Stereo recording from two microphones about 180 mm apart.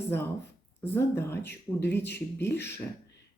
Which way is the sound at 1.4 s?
70° left (ahead or behind).